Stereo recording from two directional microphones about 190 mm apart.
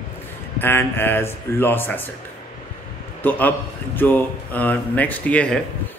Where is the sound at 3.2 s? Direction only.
10° left (ahead or behind).